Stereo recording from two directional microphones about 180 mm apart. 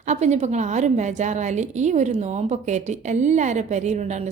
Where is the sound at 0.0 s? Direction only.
40° right (ahead or behind).